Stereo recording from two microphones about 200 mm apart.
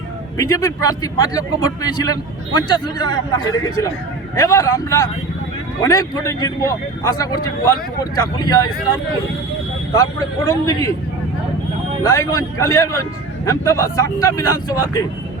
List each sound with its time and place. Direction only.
0.3 s a man's voice: 15° left (ahead or behind)
12.0 s a man's voice: 15° left (ahead or behind)